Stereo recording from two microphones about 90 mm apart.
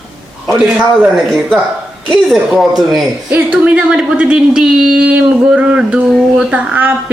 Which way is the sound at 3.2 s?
20° right (ahead or behind).